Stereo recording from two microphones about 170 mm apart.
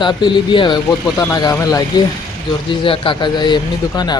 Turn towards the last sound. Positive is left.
turn(degrees=25)  # may be behind; listen again after turning